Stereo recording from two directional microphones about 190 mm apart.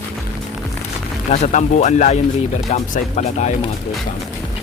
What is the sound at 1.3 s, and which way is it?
Speech, 35° left (ahead or behind).